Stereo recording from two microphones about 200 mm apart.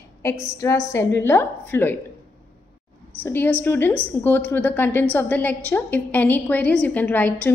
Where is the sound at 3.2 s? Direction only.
10° left (ahead or behind).